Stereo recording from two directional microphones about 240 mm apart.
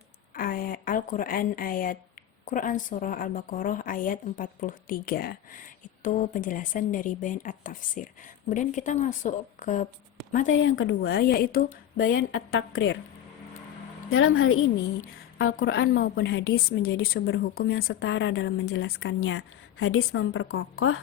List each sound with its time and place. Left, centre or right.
0.3 s a woman's voice: left
10.4 s speech: left
11.9 s a woman's voice: left
14.1 s a woman's voice: left
15.5 s speech: left
16.8 s a woman's voice: left